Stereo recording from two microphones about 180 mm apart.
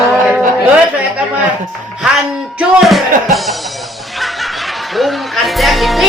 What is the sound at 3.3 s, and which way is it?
Music, centre (ahead or behind).